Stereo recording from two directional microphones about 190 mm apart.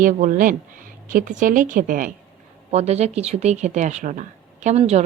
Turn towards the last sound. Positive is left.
turn(degrees=-35)  # may be behind; listen again after turning